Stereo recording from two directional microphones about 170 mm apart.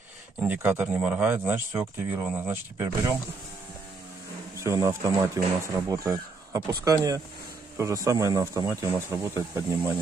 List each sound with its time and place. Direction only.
0.5 s speech: 10° right (ahead or behind)
4.6 s speech: 20° right (ahead or behind)